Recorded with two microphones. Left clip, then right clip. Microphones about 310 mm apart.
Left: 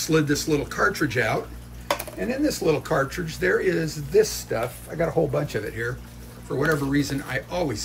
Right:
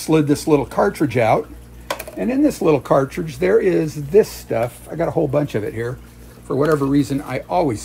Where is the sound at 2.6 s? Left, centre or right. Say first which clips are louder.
Right 7 dB; centre.